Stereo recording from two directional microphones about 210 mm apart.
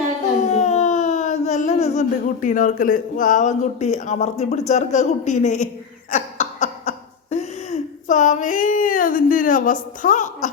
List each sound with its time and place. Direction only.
0.4 s speech: 30° left (ahead or behind)
6.1 s cough: 35° left (ahead or behind)